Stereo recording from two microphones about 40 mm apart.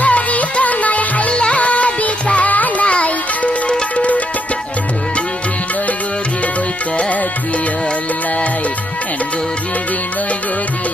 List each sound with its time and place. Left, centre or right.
0.0 s music: left
1.3 s music: left